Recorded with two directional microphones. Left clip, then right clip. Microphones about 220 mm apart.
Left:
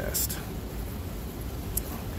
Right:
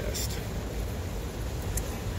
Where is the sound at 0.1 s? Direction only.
40° left (ahead or behind).